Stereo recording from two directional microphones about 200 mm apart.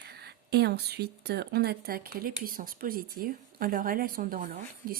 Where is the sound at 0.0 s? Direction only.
55° right (ahead or behind).